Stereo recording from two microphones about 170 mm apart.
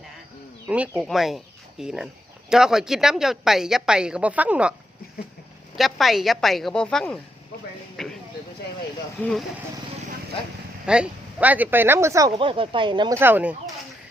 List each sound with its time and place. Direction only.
0.7 s a woman's voice: 5° right (ahead or behind)
5.7 s a woman's voice: centre (ahead or behind)
8.0 s a sound: centre (ahead or behind)
10.8 s speech: 5° right (ahead or behind)
12.4 s speech: 30° right (ahead or behind)
13.1 s speech: 10° right (ahead or behind)